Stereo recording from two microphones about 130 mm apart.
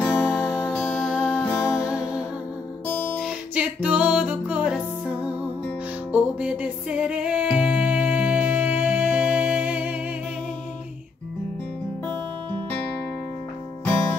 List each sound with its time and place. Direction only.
0.1 s music: 5° right (ahead or behind)
1.4 s music: 15° left (ahead or behind)
1.7 s music: 5° right (ahead or behind)
2.9 s guitar: 15° left (ahead or behind)
3.2 s music: 10° right (ahead or behind)
13.8 s music: 10° left (ahead or behind)